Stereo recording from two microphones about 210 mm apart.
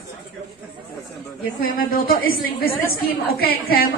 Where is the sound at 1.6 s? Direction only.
45° left (ahead or behind).